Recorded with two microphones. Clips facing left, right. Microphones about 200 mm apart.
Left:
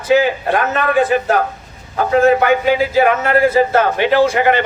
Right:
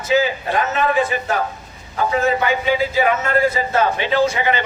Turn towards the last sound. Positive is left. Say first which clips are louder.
# left 5 dB
turn(degrees=55)  # may be behind; listen again after turning